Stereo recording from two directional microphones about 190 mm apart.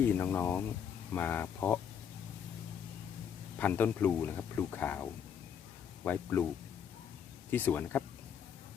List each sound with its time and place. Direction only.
0.0 s speech: 10° left (ahead or behind)
3.6 s speech: 10° left (ahead or behind)
6.1 s speech: 10° left (ahead or behind)
7.5 s speech: 10° left (ahead or behind)